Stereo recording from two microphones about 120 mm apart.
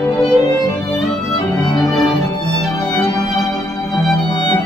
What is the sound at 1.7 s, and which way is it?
Music, centre (ahead or behind).